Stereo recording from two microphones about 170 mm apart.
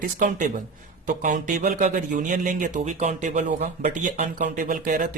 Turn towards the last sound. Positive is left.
turn(degrees=-50)  # may be behind; listen again after turning